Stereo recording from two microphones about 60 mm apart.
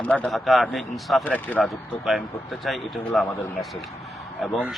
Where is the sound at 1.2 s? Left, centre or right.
Left.